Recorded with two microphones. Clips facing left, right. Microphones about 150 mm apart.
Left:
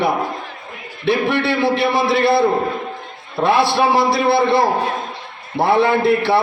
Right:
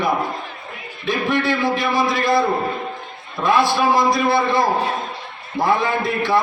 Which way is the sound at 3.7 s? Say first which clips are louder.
Left 1 dB; 70° left (ahead or behind).